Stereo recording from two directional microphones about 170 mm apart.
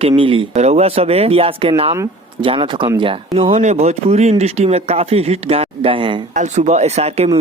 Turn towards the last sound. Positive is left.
turn(degrees=-40)  # may be behind; listen again after turning